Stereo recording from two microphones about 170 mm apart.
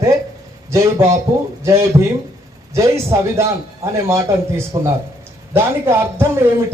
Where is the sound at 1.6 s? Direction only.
15° right (ahead or behind).